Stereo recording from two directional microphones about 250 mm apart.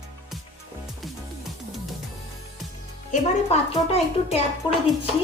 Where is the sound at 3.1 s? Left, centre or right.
Left.